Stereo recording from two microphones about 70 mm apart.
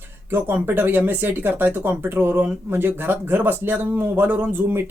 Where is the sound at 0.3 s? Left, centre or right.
Right.